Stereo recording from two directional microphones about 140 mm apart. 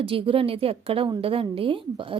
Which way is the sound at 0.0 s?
40° right (ahead or behind).